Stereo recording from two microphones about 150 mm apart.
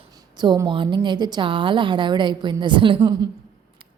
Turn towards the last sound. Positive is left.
turn(degrees=-30)  # may be behind; listen again after turning